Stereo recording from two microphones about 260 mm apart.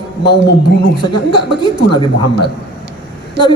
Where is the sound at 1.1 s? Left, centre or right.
Centre.